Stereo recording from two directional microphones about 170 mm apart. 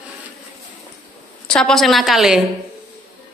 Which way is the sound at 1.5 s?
5° left (ahead or behind).